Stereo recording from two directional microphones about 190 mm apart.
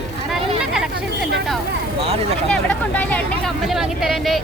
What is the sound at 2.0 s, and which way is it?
Speech, 30° right (ahead or behind).